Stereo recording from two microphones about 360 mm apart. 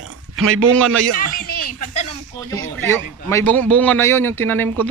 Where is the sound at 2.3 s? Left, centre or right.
Centre.